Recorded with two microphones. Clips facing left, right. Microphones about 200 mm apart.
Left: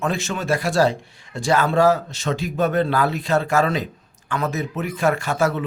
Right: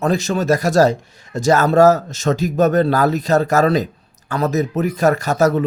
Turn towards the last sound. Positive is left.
turn(degrees=-40)  # may be behind; listen again after turning